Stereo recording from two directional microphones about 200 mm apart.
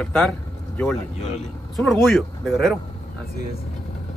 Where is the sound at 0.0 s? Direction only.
Centre (ahead or behind).